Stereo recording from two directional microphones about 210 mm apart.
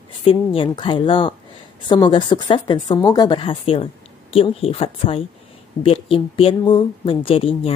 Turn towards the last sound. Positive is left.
turn(degrees=25)  # may be behind; listen again after turning